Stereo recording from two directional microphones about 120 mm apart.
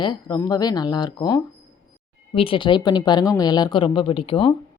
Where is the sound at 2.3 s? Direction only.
45° left (ahead or behind).